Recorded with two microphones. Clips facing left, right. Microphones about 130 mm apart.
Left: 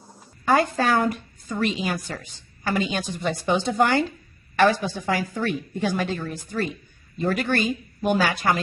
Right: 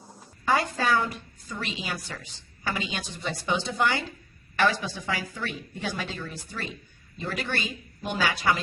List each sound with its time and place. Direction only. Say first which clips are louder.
0.4 s a woman's voice: left 5 dB; 50° left (ahead or behind)